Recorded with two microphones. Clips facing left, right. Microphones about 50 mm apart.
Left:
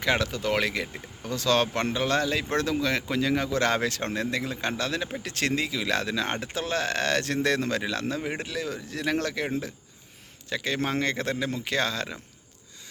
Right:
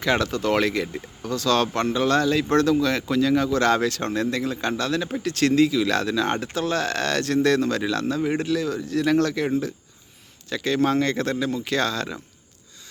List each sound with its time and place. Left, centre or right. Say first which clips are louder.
0.0 s speech: right 4 dB; centre